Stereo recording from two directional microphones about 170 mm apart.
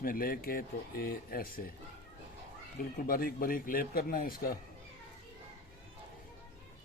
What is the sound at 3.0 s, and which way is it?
Speech, 60° left (ahead or behind).